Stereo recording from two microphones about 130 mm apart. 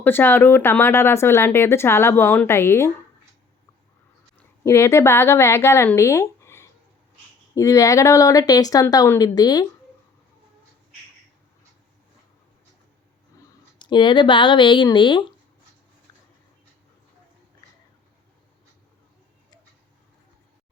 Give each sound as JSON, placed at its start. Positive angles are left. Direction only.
{"t": 0.0, "sound": "speech", "side_deg": 15}
{"t": 4.4, "sound": "a woman's voice", "side_deg": 20}
{"t": 13.7, "sound": "speech", "side_deg": 35}